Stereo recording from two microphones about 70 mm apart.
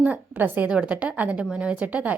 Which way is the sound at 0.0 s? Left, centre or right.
Right.